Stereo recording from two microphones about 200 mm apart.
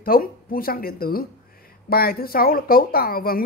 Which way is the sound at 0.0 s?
45° left (ahead or behind).